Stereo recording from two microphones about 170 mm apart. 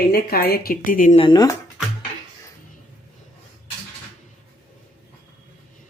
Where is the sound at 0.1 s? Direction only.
65° left (ahead or behind).